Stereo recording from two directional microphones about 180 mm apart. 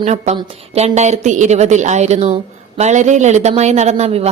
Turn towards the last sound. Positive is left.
turn(degrees=-35)  # may be behind; listen again after turning